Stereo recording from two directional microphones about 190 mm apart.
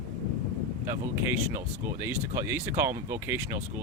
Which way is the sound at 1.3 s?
10° right (ahead or behind).